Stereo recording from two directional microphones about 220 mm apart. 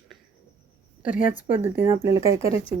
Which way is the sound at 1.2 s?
35° left (ahead or behind).